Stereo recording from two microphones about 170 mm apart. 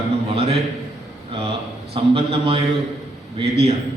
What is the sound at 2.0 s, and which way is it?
Speech, 35° right (ahead or behind).